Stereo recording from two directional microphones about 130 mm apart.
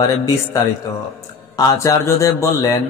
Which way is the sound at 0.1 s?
25° left (ahead or behind).